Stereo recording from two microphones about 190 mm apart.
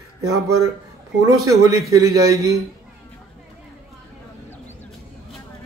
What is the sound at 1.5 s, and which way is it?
A man's voice, 20° right (ahead or behind).